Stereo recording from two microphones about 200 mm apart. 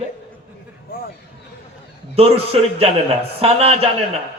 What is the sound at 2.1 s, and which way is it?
A man's voice, 30° right (ahead or behind).